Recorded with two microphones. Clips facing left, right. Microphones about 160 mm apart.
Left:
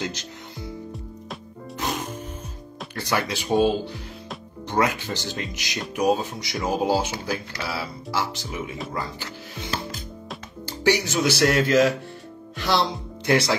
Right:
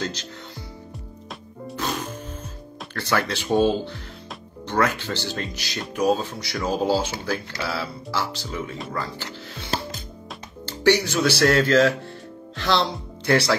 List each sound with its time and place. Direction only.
0.0 s speech: 15° left (ahead or behind)
2.9 s speech: 15° left (ahead or behind)
3.5 s speech: 5° left (ahead or behind)
10.8 s speech: 15° left (ahead or behind)